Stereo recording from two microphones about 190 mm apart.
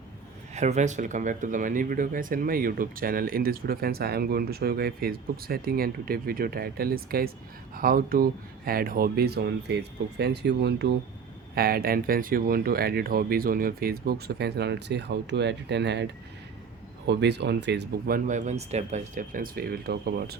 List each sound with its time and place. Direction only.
0.5 s speech: 35° right (ahead or behind); by 16.0 s 65° right (ahead or behind)
17.1 s speech: 65° right (ahead or behind)